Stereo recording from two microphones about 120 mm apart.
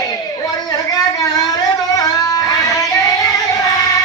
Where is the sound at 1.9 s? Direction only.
30° left (ahead or behind).